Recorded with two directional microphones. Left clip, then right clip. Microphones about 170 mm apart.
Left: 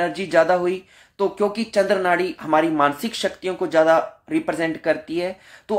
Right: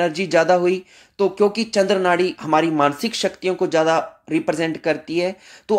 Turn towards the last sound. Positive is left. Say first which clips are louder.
# right 4 dB
turn(degrees=-40)  # may be behind; listen again after turning